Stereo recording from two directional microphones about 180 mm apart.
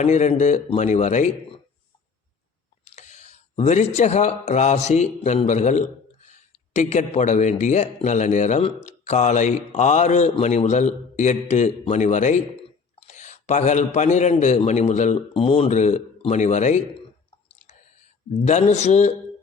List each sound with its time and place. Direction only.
0.0 s speech: 40° left (ahead or behind)
2.8 s speech: 40° left (ahead or behind)
18.4 s speech: 40° left (ahead or behind)